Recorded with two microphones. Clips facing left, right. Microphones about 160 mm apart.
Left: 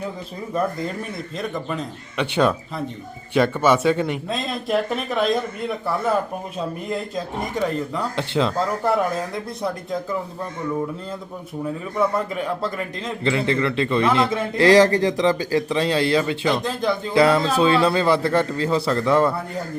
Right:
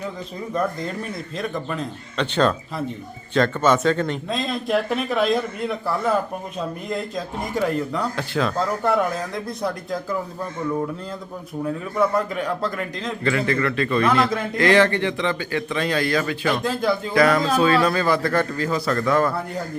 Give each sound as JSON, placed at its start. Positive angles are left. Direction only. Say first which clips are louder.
{"t": 1.4, "sound": "speech", "louder": "even", "side_deg": 0}
{"t": 2.1, "sound": "speech", "louder": "left 1 dB", "side_deg": 10}
{"t": 7.5, "sound": "speech", "louder": "right 2 dB", "side_deg": 0}
{"t": 8.1, "sound": "a man's voice", "louder": "left 2 dB", "side_deg": 25}
{"t": 9.3, "sound": "speech", "louder": "even", "side_deg": 0}
{"t": 11.9, "sound": "speech", "louder": "right 1 dB", "side_deg": 0}
{"t": 13.2, "sound": "a man's voice", "louder": "left 1 dB", "side_deg": 25}
{"t": 14.6, "sound": "speech", "louder": "left 3 dB", "side_deg": 35}
{"t": 16.6, "sound": "speech", "louder": "right 1 dB", "side_deg": -5}
{"t": 17.2, "sound": "a man's voice", "louder": "left 1 dB", "side_deg": 25}